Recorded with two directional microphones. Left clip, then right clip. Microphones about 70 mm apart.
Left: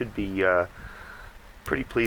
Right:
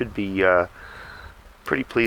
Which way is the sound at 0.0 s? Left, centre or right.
Right.